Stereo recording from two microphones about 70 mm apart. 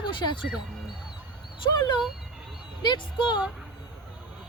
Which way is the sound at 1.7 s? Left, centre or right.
Left.